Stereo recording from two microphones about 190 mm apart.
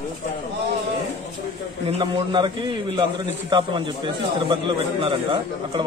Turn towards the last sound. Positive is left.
turn(degrees=-25)  # may be behind; listen again after turning